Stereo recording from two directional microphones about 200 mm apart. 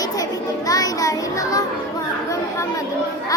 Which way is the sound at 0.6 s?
20° left (ahead or behind).